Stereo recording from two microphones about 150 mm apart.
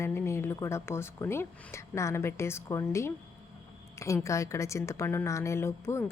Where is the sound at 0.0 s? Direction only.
15° left (ahead or behind).